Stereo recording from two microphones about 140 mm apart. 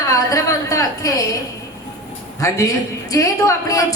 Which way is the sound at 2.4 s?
25° left (ahead or behind).